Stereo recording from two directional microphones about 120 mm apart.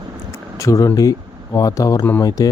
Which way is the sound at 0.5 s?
25° left (ahead or behind).